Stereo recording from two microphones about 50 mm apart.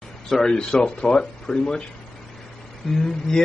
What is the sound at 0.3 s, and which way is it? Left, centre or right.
A man's voice, centre.